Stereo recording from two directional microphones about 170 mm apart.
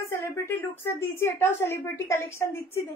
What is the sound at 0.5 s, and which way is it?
A woman's voice, 10° left (ahead or behind).